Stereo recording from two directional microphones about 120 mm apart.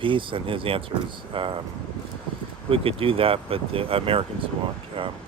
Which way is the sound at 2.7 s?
50° right (ahead or behind).